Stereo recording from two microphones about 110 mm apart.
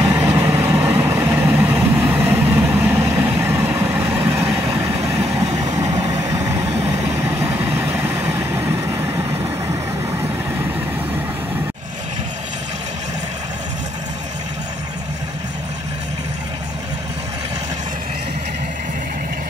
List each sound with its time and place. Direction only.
0.0 s vehicle: 25° right (ahead or behind)
5.6 s vehicle: 35° right (ahead or behind)